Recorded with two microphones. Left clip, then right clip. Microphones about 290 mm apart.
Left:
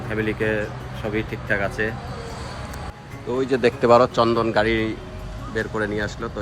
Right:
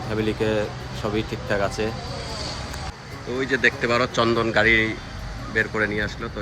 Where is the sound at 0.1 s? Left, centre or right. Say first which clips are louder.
Even; centre.